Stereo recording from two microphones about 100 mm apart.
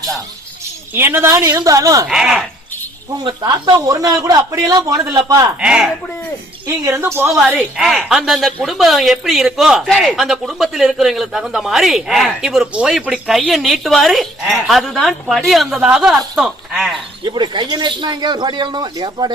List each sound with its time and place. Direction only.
0.9 s a man's voice: 20° right (ahead or behind)
2.0 s speech: 5° right (ahead or behind)
3.2 s a man's voice: 45° right (ahead or behind)
5.5 s speech: 10° right (ahead or behind)
6.8 s speech: 25° right (ahead or behind)
7.8 s speech: centre (ahead or behind)
17.2 s speech: 50° right (ahead or behind)